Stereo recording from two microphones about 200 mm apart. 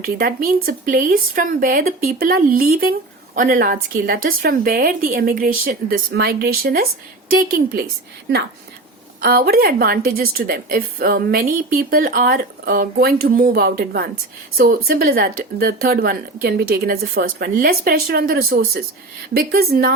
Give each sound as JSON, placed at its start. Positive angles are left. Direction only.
{"t": 0.0, "sound": "a woman's voice", "side_deg": -45}
{"t": 9.2, "sound": "a woman's voice", "side_deg": -50}